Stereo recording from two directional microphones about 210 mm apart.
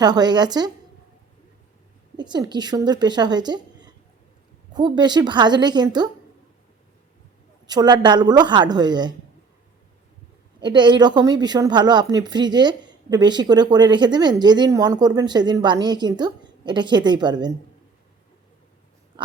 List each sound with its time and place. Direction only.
0.0 s speech: 20° right (ahead or behind)
2.1 s a woman's voice: 20° right (ahead or behind)
7.7 s speech: 20° right (ahead or behind)
10.6 s speech: 20° right (ahead or behind)